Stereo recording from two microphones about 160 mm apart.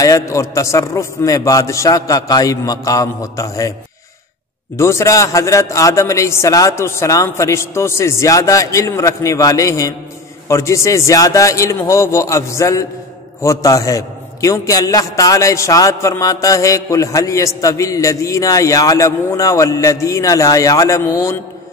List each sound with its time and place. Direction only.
0.0 s a man's voice: 20° left (ahead or behind)
4.7 s a man's voice: 15° left (ahead or behind)